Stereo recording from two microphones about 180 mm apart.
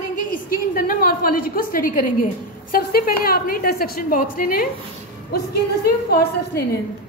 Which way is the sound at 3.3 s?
55° left (ahead or behind).